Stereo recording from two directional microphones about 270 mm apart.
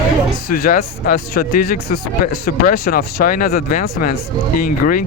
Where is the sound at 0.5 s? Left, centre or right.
Left.